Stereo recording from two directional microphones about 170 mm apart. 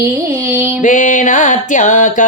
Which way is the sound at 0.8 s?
45° left (ahead or behind).